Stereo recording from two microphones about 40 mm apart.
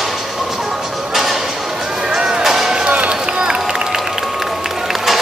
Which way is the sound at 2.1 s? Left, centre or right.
Centre.